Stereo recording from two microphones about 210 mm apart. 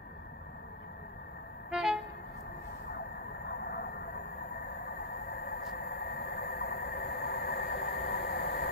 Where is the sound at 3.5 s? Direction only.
50° left (ahead or behind).